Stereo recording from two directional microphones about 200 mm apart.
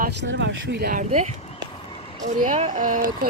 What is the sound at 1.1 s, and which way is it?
Speech, 35° right (ahead or behind).